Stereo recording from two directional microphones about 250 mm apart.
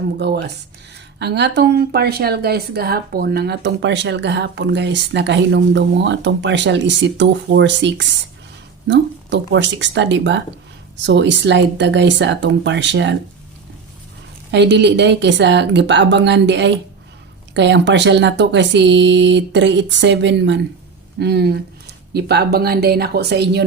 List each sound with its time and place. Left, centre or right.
0.2 s speech: right
14.5 s a woman's voice: right